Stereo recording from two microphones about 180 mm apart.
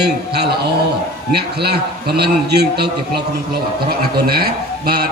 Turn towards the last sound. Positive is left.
turn(degrees=-60)  # may be behind; listen again after turning